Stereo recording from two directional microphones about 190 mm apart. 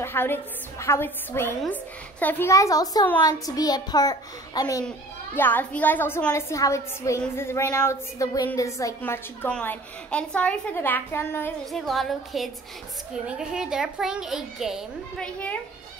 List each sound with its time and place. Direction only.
0.0 s a child's voice: 10° left (ahead or behind)
11.7 s a child's voice: centre (ahead or behind)